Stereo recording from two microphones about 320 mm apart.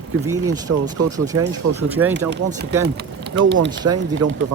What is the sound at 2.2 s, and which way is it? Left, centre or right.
Speech, right.